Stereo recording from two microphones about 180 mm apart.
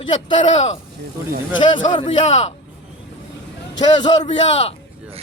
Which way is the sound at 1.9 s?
30° left (ahead or behind).